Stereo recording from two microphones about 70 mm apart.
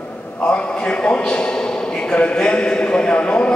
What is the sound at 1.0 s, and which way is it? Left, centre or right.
A man's voice, centre.